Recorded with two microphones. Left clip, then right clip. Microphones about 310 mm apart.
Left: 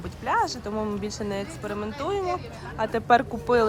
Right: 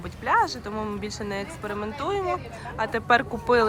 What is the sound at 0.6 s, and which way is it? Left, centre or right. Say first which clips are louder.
Speech: left 1 dB; centre.